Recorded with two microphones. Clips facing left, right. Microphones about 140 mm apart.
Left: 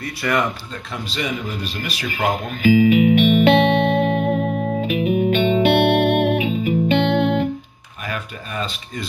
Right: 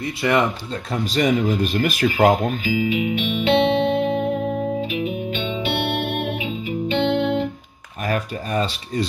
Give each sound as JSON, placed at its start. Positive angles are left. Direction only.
{"t": 0.0, "sound": "speech", "side_deg": -25}
{"t": 1.0, "sound": "speech", "side_deg": -45}
{"t": 2.5, "sound": "music", "side_deg": 55}
{"t": 8.1, "sound": "speech", "side_deg": -40}